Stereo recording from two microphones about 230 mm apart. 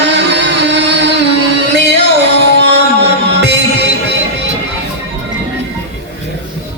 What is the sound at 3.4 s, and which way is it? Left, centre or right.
Music, right.